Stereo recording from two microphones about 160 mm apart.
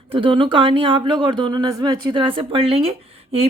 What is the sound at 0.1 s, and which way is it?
Speech, 30° right (ahead or behind).